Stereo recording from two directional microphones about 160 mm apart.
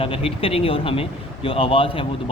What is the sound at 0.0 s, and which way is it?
Speech, 35° left (ahead or behind).